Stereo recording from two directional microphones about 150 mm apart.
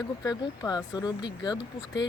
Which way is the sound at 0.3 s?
20° left (ahead or behind).